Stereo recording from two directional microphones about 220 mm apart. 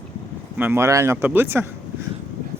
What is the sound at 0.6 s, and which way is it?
Speech, 10° right (ahead or behind).